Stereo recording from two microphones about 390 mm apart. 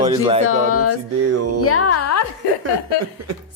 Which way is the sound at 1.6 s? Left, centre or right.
Left.